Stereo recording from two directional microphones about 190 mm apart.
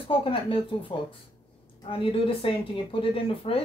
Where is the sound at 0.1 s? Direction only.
30° left (ahead or behind).